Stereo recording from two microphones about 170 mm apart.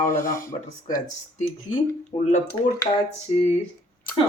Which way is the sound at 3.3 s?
35° left (ahead or behind).